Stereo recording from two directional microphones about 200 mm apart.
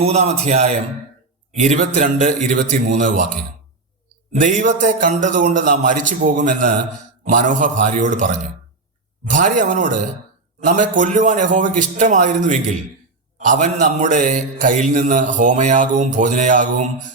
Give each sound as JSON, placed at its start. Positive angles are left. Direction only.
{"t": 0.0, "sound": "speech", "side_deg": -30}
{"t": 4.4, "sound": "speech", "side_deg": -40}